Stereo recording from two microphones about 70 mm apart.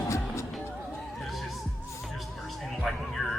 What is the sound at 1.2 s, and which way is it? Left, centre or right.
Music, centre.